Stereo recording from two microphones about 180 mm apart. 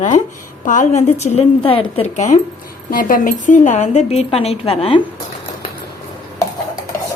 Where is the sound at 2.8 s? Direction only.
50° left (ahead or behind); by 5.0 s 35° left (ahead or behind).